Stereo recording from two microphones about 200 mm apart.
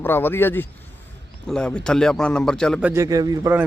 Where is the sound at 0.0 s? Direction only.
10° left (ahead or behind).